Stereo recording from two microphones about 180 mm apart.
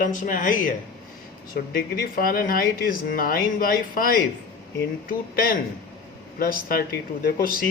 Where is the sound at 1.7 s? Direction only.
55° left (ahead or behind).